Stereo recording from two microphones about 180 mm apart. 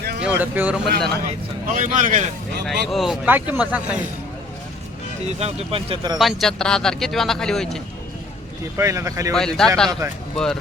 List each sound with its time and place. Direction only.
0.2 s speech: 10° right (ahead or behind)
1.6 s speech: 45° right (ahead or behind)
2.6 s speech: centre (ahead or behind)
5.4 s a man's voice: 35° right (ahead or behind)
6.1 s a man's voice: centre (ahead or behind)
8.7 s speech: 15° right (ahead or behind)
9.3 s a man's voice: 5° left (ahead or behind)